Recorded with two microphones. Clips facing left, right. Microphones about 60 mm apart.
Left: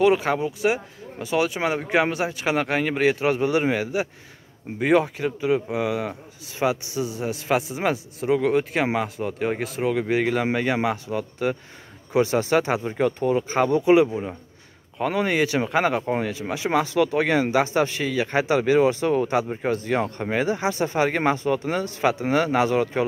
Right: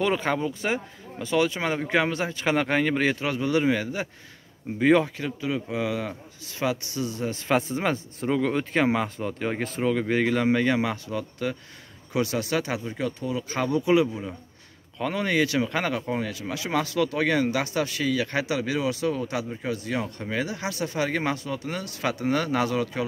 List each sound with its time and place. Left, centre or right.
0.0 s a man's voice: centre
3.3 s a man's voice: left
12.8 s speech: left
13.7 s speech: left
15.0 s speech: centre
16.0 s speech: left